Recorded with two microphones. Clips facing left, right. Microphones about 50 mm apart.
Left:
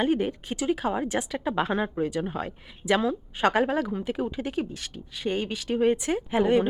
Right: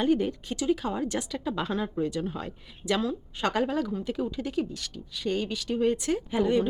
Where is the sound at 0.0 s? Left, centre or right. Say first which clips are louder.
Even; left.